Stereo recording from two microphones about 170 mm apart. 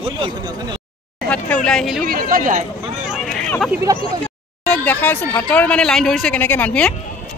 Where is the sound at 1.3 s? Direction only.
5° left (ahead or behind).